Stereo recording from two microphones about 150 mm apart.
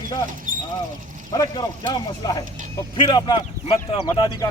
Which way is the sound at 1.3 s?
25° left (ahead or behind).